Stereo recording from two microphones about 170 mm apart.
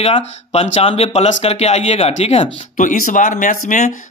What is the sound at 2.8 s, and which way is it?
Speech, 50° left (ahead or behind).